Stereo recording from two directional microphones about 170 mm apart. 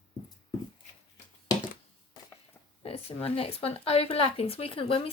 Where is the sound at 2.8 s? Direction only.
35° left (ahead or behind).